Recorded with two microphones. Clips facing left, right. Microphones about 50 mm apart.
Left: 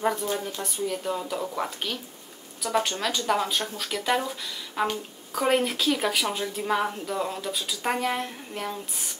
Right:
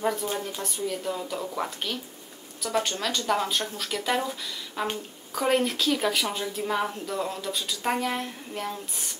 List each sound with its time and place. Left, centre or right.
0.6 s a woman's voice: centre